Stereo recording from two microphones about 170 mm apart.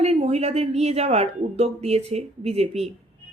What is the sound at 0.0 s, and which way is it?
Speech, 40° right (ahead or behind).